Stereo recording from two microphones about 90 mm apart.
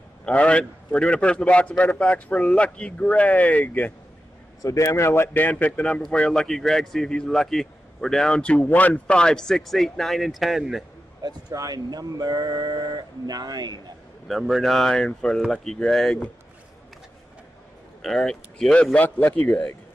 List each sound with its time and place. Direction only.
0.2 s a man's voice: 10° left (ahead or behind)
4.6 s a man's voice: 35° left (ahead or behind); by 10.8 s centre (ahead or behind)
11.2 s speech: 45° right (ahead or behind)
14.2 s speech: centre (ahead or behind)
18.0 s a man's voice: 5° left (ahead or behind)